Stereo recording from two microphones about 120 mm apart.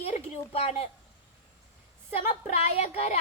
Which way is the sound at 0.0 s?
55° left (ahead or behind).